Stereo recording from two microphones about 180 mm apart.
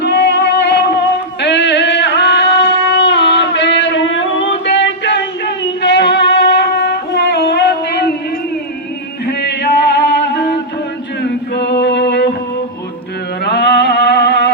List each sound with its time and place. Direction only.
0.0 s a sound: 70° left (ahead or behind)
9.2 s music: 65° left (ahead or behind)
13.4 s music: 65° left (ahead or behind)